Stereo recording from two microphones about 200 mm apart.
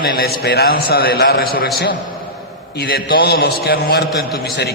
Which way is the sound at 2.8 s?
50° left (ahead or behind).